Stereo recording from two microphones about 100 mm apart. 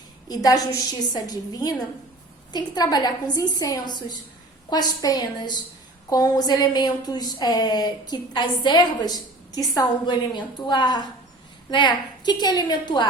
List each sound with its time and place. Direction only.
0.3 s a woman's voice: 35° left (ahead or behind)